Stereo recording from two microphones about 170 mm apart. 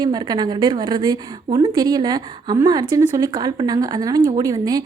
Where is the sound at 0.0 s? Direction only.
25° right (ahead or behind).